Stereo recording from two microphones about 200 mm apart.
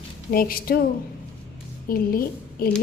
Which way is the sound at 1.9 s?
45° left (ahead or behind).